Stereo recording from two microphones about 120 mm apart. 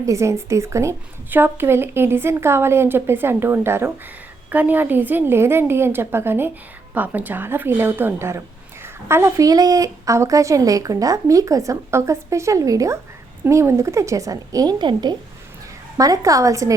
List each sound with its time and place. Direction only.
0.0 s a woman's voice: 25° right (ahead or behind)